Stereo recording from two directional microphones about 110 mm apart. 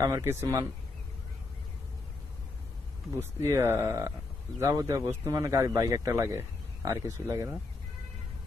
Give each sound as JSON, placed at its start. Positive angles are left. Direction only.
{"t": 0.0, "sound": "a man's voice", "side_deg": -30}
{"t": 0.4, "sound": "speech", "side_deg": -35}
{"t": 3.2, "sound": "a man's voice", "side_deg": -25}